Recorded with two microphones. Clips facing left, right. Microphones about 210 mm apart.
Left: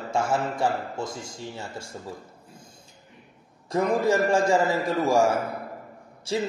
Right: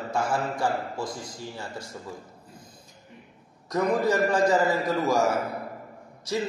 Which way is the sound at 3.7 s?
25° left (ahead or behind).